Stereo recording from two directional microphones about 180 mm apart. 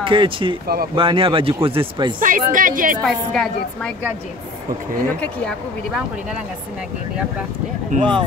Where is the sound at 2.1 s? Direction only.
50° right (ahead or behind).